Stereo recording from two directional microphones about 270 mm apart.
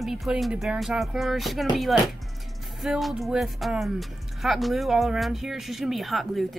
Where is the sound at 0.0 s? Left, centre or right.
Centre.